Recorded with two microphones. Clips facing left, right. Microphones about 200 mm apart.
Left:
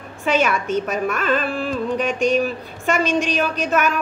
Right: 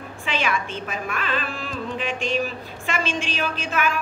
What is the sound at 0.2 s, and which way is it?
A woman's voice, 40° left (ahead or behind).